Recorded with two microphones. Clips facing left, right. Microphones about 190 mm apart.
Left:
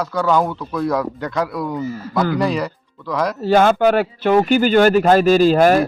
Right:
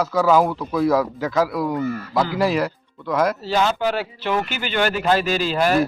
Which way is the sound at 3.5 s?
50° left (ahead or behind).